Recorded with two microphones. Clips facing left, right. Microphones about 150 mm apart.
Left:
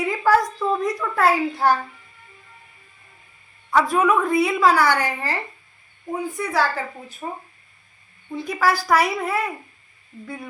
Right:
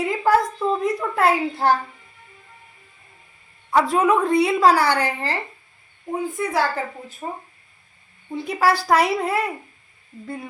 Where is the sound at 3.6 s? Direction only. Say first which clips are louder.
Right 1 dB; 25° right (ahead or behind).